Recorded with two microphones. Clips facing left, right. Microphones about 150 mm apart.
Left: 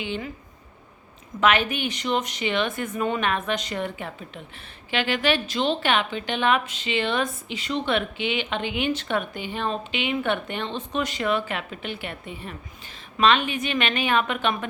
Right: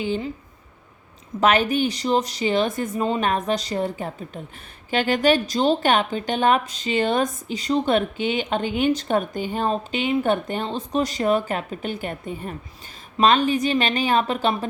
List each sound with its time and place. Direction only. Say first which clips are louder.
0.0 s speech: right 5 dB; 40° right (ahead or behind)
1.4 s speech: right 3 dB; 40° right (ahead or behind)